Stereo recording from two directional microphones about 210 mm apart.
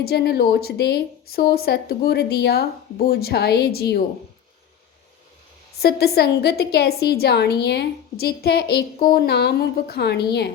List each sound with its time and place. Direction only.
0.0 s speech: 50° left (ahead or behind)
5.8 s speech: 50° left (ahead or behind)